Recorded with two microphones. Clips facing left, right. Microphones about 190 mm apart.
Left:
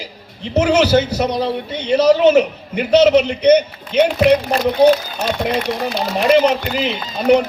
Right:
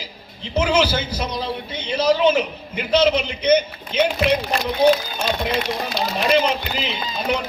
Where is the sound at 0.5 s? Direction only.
70° left (ahead or behind).